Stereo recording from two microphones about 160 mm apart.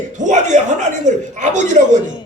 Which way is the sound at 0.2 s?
50° right (ahead or behind).